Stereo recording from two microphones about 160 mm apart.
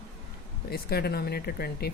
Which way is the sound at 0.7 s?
75° left (ahead or behind).